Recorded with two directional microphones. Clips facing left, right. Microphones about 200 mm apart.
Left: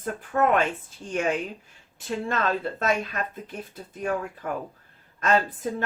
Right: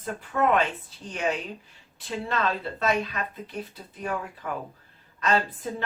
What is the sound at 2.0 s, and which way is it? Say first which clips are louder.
Speech: left 1 dB; 50° left (ahead or behind).